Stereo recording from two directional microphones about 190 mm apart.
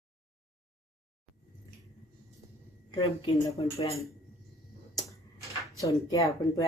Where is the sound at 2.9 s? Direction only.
25° left (ahead or behind).